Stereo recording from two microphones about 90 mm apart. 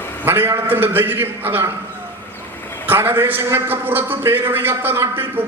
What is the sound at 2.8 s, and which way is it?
A man's voice, 25° right (ahead or behind).